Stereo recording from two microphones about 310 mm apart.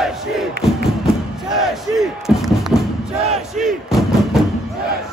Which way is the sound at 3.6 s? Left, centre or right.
Centre.